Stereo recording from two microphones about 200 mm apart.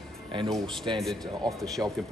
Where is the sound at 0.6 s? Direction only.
25° right (ahead or behind).